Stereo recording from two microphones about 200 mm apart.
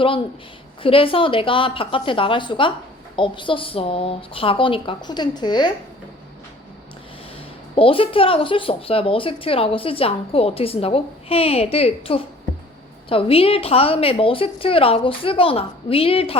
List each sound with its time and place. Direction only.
0.8 s speech: 25° left (ahead or behind)
7.8 s speech: 25° left (ahead or behind)